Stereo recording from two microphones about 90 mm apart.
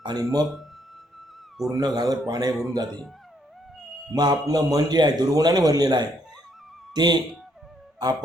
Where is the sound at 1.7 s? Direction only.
45° right (ahead or behind).